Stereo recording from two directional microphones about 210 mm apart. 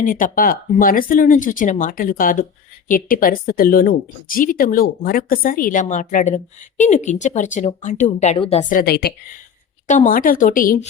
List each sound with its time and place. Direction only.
0.0 s speech: 40° left (ahead or behind)
8.7 s a woman's voice: 45° left (ahead or behind)
9.8 s speech: 35° left (ahead or behind)